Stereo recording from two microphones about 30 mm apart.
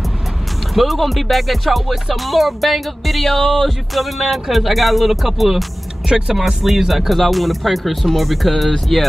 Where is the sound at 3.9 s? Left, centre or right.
Centre.